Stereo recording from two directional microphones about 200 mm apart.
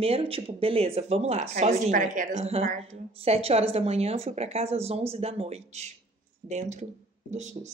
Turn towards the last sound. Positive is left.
turn(degrees=-35)  # may be behind; listen again after turning